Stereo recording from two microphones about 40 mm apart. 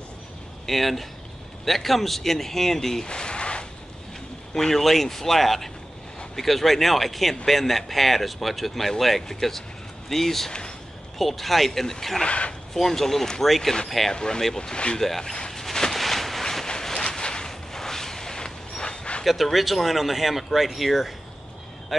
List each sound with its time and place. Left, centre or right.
0.7 s speech: centre
3.1 s a sound: left
4.6 s speech: centre
12.2 s speech: left
12.7 s speech: centre
14.1 s speech: centre
15.0 s speech: centre
15.7 s a sound: centre; by 19.2 s left
19.2 s speech: centre